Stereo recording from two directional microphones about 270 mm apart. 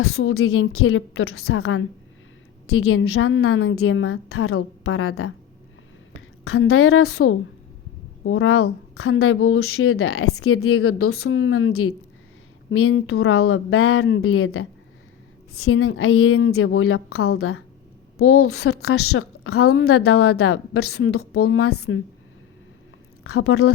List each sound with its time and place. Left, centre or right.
0.0 s a woman's voice: left
23.2 s speech: left